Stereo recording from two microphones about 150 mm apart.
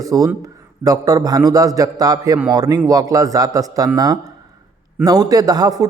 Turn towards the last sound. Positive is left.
turn(degrees=-25)  # may be behind; listen again after turning